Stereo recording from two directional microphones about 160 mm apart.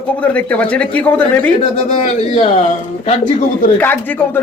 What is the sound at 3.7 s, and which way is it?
Speech, 10° left (ahead or behind).